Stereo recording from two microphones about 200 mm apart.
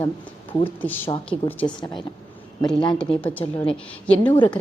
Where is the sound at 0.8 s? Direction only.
10° left (ahead or behind).